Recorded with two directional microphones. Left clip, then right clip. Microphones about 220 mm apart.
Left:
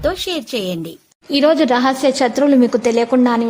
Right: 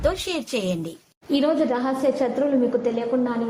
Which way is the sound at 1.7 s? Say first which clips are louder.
Left 8 dB; 45° left (ahead or behind).